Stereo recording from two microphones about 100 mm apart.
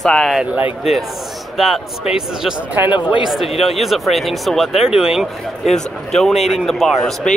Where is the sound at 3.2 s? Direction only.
Centre (ahead or behind).